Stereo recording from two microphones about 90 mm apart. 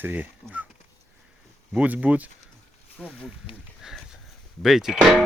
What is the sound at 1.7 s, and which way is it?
Speech, 15° right (ahead or behind).